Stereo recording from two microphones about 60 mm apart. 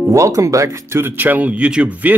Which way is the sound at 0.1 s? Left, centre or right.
Right.